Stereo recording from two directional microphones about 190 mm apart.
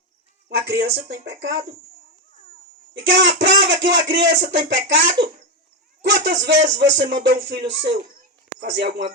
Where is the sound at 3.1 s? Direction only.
70° right (ahead or behind).